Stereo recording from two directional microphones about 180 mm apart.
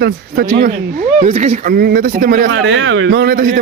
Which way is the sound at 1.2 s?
40° right (ahead or behind).